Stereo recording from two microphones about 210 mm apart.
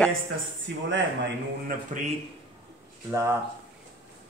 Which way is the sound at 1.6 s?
35° right (ahead or behind).